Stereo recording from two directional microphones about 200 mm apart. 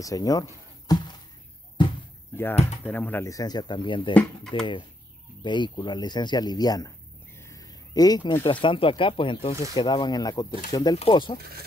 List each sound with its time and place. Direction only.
0.0 s speech: 20° left (ahead or behind)
1.8 s basketball bounce: 20° left (ahead or behind)
2.8 s speech: 10° left (ahead or behind); by 4.1 s 25° left (ahead or behind)
4.1 s speech: 5° left (ahead or behind)
5.4 s speech: 25° left (ahead or behind)
7.3 s a sound: 15° left (ahead or behind)
8.5 s speech: 25° left (ahead or behind)